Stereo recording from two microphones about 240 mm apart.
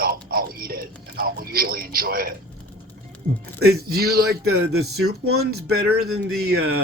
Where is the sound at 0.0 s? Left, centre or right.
Right.